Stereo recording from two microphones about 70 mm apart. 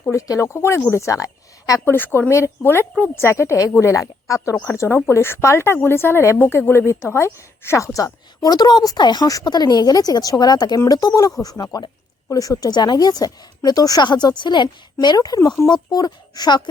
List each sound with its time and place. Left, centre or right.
0.1 s a woman's voice: left
1.8 s a woman's voice: left
2.3 s a woman's voice: left
8.4 s speech: left
12.3 s speech: left
15.0 s speech: left